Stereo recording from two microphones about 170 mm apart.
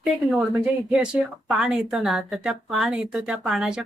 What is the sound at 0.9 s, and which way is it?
Speech, 5° right (ahead or behind).